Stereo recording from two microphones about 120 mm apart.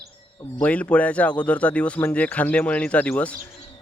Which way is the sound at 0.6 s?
10° left (ahead or behind).